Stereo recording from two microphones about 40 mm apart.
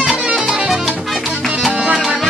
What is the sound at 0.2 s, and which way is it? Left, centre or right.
Music, centre.